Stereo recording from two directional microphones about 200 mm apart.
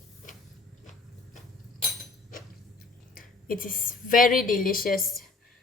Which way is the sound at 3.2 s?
45° left (ahead or behind).